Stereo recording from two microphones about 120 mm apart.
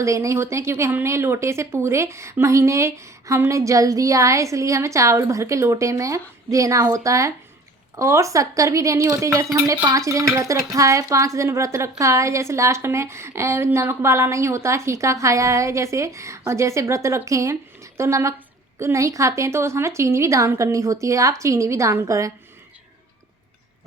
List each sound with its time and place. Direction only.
0.0 s speech: 25° right (ahead or behind)